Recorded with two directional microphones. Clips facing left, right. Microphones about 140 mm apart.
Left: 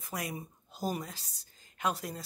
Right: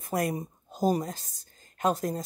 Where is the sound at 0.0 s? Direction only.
50° right (ahead or behind).